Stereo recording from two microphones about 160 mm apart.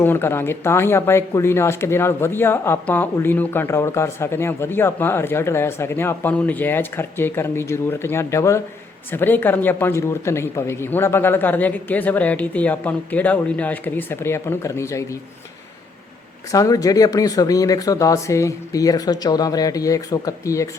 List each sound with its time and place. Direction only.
0.0 s speech: 15° left (ahead or behind)
16.5 s speech: 20° left (ahead or behind)